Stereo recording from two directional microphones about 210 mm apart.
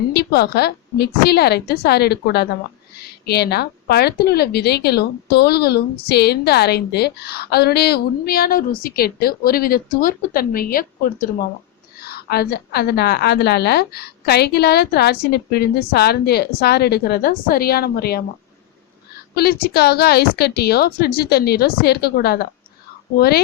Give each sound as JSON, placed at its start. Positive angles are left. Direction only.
{"t": 0.1, "sound": "a woman's voice", "side_deg": 50}
{"t": 19.3, "sound": "a woman's voice", "side_deg": 45}